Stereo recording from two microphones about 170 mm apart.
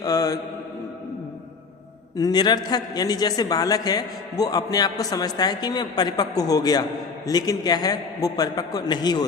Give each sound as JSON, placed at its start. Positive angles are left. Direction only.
{"t": 0.0, "sound": "a man's voice", "side_deg": 20}
{"t": 2.1, "sound": "a man's voice", "side_deg": 25}